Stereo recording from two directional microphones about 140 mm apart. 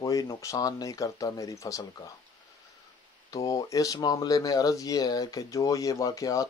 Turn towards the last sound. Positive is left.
turn(degrees=25)  # may be behind; listen again after turning